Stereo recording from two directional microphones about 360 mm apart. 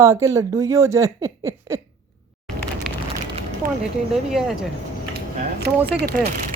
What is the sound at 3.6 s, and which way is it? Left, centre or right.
Speech, right.